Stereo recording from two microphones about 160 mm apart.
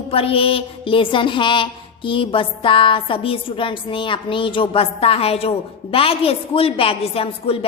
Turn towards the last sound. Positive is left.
turn(degrees=35)  # may be behind; listen again after turning